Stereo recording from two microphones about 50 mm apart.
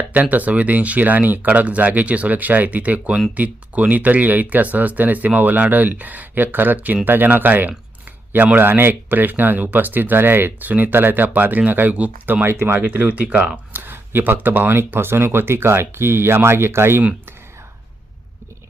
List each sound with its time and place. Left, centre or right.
0.1 s speech: right
12.5 s speech: right
12.7 s speech: right
13.7 s speech: right